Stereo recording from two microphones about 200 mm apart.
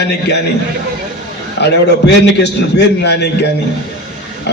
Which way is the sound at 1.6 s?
55° left (ahead or behind).